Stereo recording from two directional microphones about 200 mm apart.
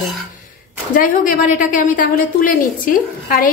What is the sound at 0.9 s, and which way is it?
A woman's voice, 45° left (ahead or behind).